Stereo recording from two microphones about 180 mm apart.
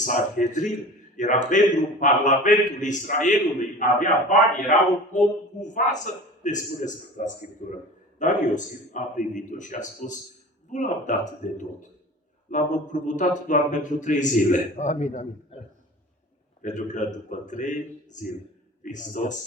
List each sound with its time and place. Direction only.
0.0 s a man's voice: 45° left (ahead or behind)
16.6 s a man's voice: 45° left (ahead or behind)